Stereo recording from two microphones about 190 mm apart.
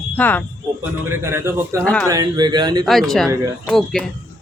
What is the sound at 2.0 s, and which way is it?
Speech, 20° right (ahead or behind).